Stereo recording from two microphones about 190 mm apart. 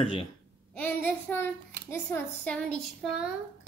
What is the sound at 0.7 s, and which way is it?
A child's voice, 10° left (ahead or behind).